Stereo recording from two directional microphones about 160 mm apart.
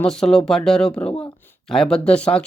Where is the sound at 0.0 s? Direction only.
5° left (ahead or behind).